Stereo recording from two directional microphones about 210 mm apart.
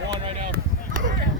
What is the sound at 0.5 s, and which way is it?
Chop, 40° right (ahead or behind).